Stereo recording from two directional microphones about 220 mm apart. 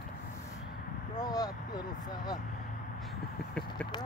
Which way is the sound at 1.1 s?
15° left (ahead or behind).